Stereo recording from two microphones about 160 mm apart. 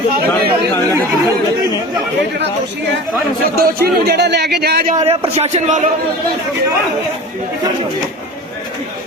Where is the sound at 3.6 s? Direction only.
80° right.